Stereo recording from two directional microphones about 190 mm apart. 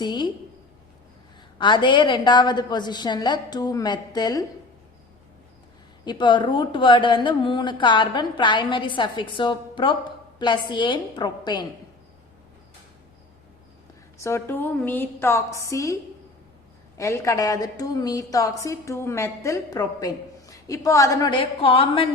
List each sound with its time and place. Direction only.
0.0 s a woman's voice: 25° left (ahead or behind)
1.5 s speech: 25° left (ahead or behind)
6.1 s speech: 25° left (ahead or behind)
14.2 s a woman's voice: 15° left (ahead or behind)
17.0 s a woman's voice: 15° left (ahead or behind)